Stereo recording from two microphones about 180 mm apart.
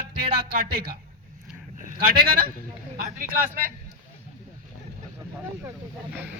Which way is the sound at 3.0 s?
50° right (ahead or behind).